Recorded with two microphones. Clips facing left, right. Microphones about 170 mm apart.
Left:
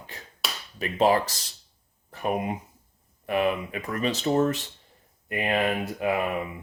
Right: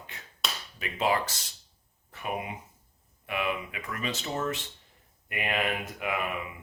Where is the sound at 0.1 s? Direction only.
35° left (ahead or behind).